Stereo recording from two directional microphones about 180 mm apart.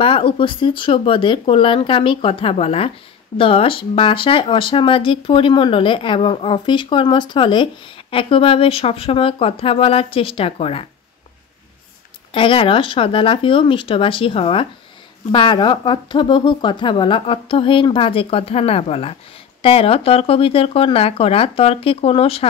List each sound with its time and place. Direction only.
0.0 s speech: 30° left (ahead or behind)
12.3 s speech: 30° left (ahead or behind)